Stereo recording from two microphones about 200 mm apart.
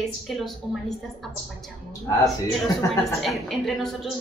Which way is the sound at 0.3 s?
Centre (ahead or behind).